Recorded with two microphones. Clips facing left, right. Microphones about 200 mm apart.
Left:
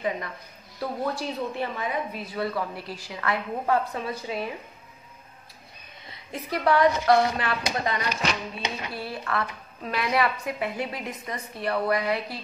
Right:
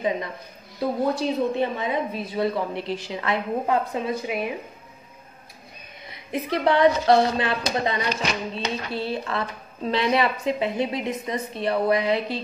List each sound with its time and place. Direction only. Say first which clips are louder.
0.0 s a woman's voice: right 4 dB; 20° right (ahead or behind)
6.0 s speech: right 7 dB; 20° right (ahead or behind)